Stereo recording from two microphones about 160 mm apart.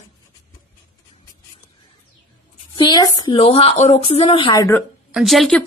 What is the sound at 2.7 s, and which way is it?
Speech, 25° left (ahead or behind).